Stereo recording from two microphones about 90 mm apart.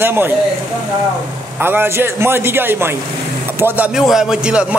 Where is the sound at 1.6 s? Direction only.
25° right (ahead or behind).